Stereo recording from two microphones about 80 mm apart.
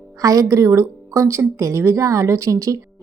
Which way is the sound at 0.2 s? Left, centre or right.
Right.